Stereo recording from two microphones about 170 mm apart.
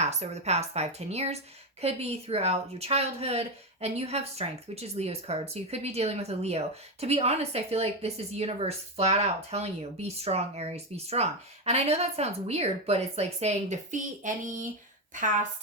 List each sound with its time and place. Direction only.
0.0 s a woman's voice: 40° right (ahead or behind)